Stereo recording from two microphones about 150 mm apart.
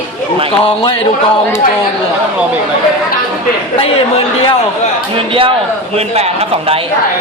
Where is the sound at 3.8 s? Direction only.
40° left (ahead or behind).